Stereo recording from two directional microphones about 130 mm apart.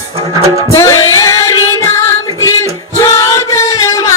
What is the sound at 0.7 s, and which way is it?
Female singing, 25° left (ahead or behind).